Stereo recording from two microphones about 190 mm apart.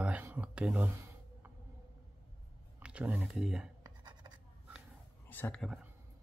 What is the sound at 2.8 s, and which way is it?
Speech, 5° right (ahead or behind).